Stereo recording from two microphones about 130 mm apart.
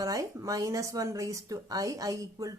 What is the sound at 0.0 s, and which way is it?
A woman's voice, 25° right (ahead or behind).